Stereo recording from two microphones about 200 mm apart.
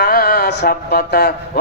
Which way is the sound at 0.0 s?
45° left (ahead or behind).